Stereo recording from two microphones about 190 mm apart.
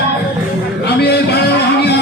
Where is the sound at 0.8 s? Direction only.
60° left (ahead or behind).